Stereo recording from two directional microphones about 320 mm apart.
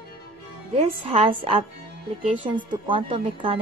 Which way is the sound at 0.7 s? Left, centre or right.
Centre.